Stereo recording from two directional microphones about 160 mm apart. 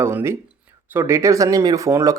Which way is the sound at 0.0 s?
15° right (ahead or behind).